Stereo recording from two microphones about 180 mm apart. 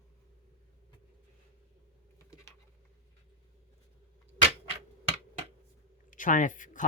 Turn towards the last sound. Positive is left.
turn(degrees=45)  # may be behind; listen again after turning